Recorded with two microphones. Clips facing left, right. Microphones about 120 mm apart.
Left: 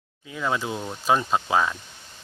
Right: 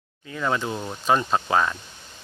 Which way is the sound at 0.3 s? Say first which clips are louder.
Right 1 dB; 5° left (ahead or behind).